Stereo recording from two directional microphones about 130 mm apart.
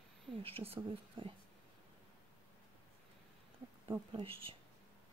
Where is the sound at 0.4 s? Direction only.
45° right (ahead or behind).